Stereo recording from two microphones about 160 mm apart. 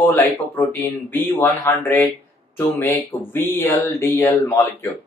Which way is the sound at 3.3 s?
15° left (ahead or behind).